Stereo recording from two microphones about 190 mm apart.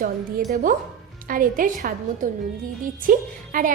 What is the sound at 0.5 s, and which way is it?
A woman's voice, 45° right (ahead or behind).